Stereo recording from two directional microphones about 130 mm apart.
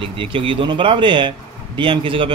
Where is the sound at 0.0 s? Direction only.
40° right (ahead or behind).